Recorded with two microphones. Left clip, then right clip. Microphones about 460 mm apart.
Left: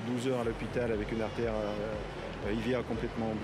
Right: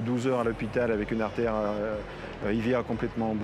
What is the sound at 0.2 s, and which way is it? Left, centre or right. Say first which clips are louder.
Speech: right 5 dB; right.